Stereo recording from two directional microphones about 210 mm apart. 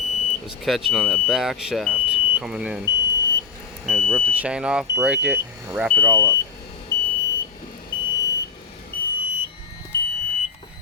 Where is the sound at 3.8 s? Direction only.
5° right (ahead or behind).